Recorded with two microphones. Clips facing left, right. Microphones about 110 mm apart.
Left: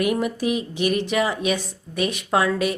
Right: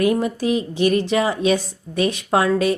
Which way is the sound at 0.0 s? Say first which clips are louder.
Right 3 dB; 30° right (ahead or behind).